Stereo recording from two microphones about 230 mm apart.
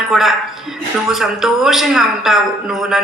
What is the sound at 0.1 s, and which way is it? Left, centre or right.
Speech, centre.